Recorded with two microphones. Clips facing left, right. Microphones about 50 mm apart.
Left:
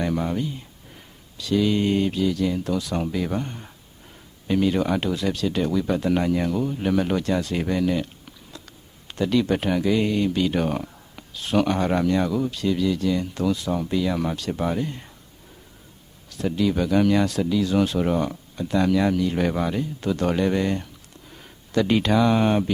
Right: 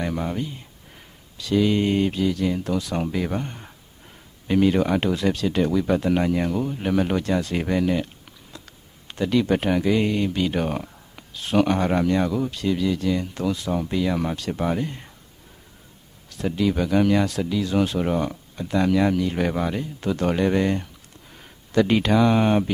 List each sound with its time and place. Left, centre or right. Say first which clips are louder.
0.0 s speech: left 2 dB; centre
1.5 s speech: right 1 dB; right
3.2 s speech: even; centre
16.4 s speech: even; right
19.4 s speech: left 1 dB; centre